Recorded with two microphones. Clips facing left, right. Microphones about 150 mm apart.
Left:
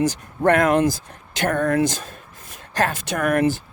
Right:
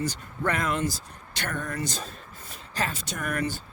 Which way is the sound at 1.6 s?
75° left (ahead or behind).